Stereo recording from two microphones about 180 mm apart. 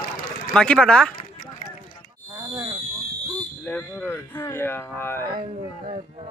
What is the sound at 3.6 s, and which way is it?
A man's voice, 10° left (ahead or behind).